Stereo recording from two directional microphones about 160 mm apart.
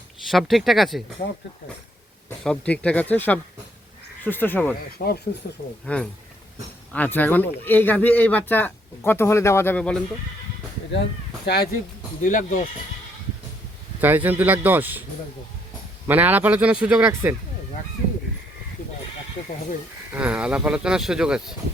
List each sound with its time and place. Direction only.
0.3 s speech: centre (ahead or behind)
2.4 s speech: 5° left (ahead or behind)
5.0 s speech: 70° left (ahead or behind)
5.8 s speech: 5° left (ahead or behind)
10.9 s speech: 90° left
12.2 s speech: 55° left (ahead or behind)
14.0 s speech: 10° right (ahead or behind)
16.0 s speech: 10° right (ahead or behind)
20.1 s speech: 10° right (ahead or behind)